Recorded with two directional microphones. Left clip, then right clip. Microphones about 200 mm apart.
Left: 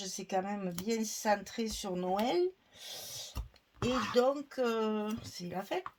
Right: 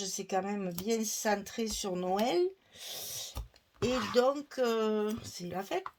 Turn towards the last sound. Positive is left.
turn(degrees=-40)  # may be behind; listen again after turning